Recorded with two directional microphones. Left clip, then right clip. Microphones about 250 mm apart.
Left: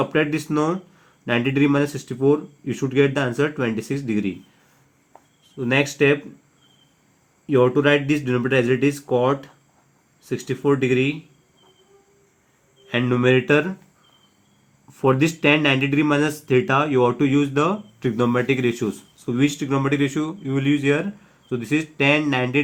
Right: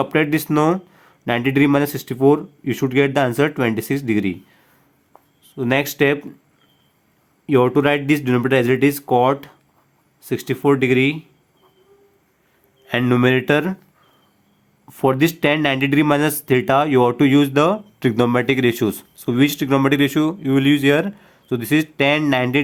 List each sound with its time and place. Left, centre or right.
0.0 s speech: right
5.5 s speech: right
7.4 s speech: right
12.9 s speech: right
14.8 s speech: right